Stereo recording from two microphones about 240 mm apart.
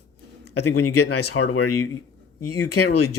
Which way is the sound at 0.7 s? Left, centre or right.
Left.